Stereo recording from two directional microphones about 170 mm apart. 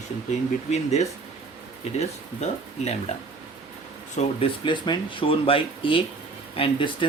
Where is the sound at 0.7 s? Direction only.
40° left (ahead or behind).